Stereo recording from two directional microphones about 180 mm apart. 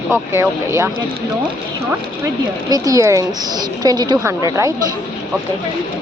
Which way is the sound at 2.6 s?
20° right (ahead or behind).